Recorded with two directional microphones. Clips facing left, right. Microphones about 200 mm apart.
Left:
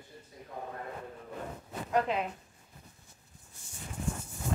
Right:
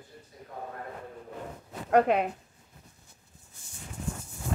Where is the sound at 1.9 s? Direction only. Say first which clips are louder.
Right 7 dB; 60° right (ahead or behind).